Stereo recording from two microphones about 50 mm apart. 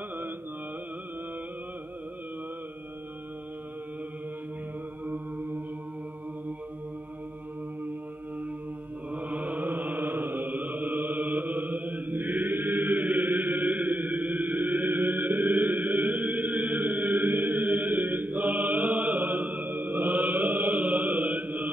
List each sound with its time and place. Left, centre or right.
5.0 s mantra: right
9.1 s mantra: right
13.7 s chant: right
16.8 s chant: right